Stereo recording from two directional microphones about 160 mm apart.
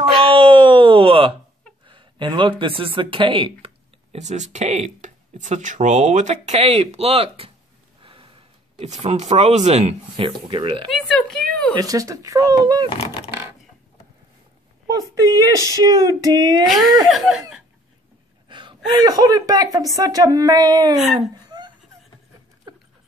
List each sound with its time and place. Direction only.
0.2 s wail: 35° right (ahead or behind)
1.9 s speech: 30° right (ahead or behind)
10.9 s speech: centre (ahead or behind)
11.7 s speech: 20° right (ahead or behind)
12.9 s speech: 35° left (ahead or behind)
14.9 s speech: 25° right (ahead or behind)
16.6 s speech: centre (ahead or behind)
18.5 s gasp: 30° right (ahead or behind)
19.0 s speech: 25° right (ahead or behind)
21.5 s a sound: 25° right (ahead or behind)